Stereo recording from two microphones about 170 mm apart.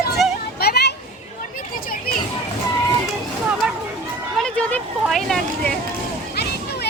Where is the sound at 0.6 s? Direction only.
70° left (ahead or behind).